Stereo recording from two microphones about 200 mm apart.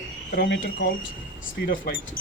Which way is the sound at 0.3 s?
55° left (ahead or behind).